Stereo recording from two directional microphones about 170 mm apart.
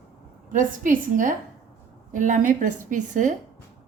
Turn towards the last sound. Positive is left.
turn(degrees=-45)  # may be behind; listen again after turning